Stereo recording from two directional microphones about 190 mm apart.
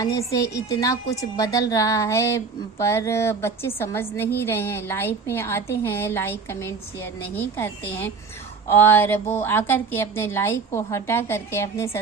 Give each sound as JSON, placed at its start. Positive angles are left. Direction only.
{"t": 0.0, "sound": "a woman's voice", "side_deg": 15}